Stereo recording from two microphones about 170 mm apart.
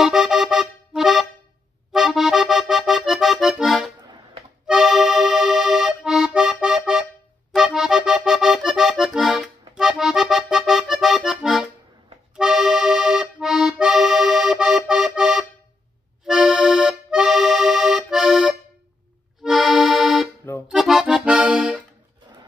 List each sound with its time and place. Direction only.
0.0 s music: 5° right (ahead or behind)
1.9 s accordion: centre (ahead or behind)
4.1 s music: 30° right (ahead or behind)
4.6 s accordion: centre (ahead or behind)